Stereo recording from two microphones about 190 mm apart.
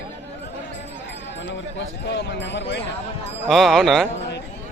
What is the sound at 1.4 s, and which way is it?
Speech, 70° left (ahead or behind).